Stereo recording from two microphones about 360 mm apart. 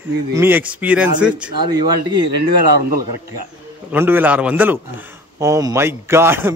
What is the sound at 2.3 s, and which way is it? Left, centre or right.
Speech, right.